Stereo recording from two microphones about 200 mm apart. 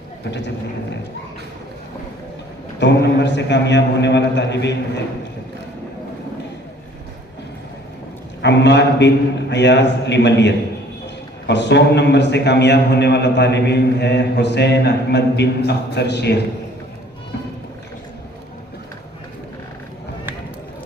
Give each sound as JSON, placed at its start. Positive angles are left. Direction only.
{"t": 0.3, "sound": "a man's voice", "side_deg": 60}
{"t": 2.8, "sound": "a man's voice", "side_deg": 60}
{"t": 8.4, "sound": "a man's voice", "side_deg": 60}